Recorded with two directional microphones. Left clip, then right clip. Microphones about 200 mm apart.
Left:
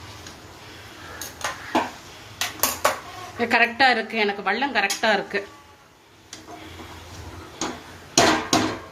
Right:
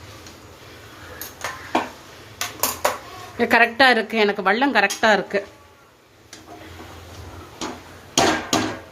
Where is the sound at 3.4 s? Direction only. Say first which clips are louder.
Right 3 dB; 40° right (ahead or behind).